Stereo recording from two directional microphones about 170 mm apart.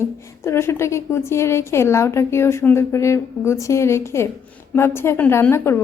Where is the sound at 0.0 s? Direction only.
15° left (ahead or behind).